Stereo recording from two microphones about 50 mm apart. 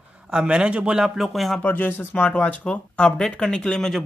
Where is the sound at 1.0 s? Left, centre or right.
Centre.